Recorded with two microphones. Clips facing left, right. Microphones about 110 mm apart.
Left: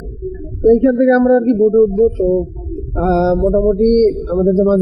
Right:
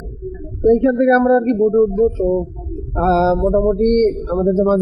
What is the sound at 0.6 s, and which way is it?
Speech, 40° right (ahead or behind).